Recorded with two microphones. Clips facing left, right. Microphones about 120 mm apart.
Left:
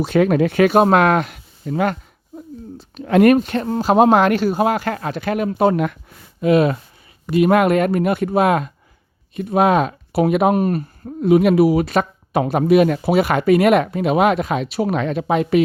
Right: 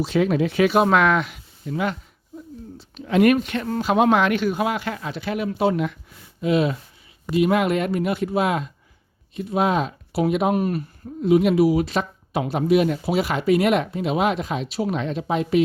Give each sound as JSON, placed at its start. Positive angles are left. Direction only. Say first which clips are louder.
{"t": 0.0, "sound": "speech", "louder": "left 5 dB", "side_deg": 55}